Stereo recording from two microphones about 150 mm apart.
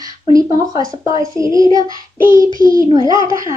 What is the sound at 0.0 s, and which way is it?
Speech, 25° right (ahead or behind).